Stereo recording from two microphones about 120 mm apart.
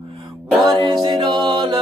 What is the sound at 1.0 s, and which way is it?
A capella, 35° right (ahead or behind).